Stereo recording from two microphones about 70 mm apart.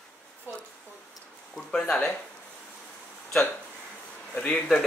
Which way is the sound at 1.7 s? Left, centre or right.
Centre.